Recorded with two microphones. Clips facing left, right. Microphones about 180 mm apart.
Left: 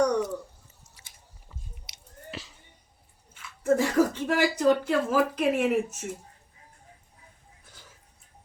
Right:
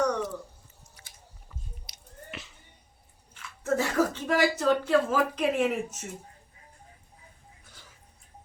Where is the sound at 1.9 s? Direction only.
35° left (ahead or behind).